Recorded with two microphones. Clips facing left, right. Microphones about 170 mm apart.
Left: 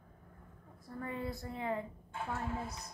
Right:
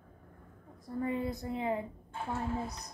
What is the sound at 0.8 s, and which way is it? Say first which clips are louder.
A woman's voice: right 6 dB; 20° right (ahead or behind).